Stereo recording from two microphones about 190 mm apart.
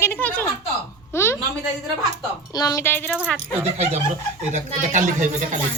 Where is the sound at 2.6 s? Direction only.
15° left (ahead or behind).